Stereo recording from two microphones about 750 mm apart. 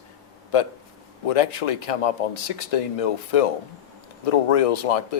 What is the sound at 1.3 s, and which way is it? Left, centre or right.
Speech, left.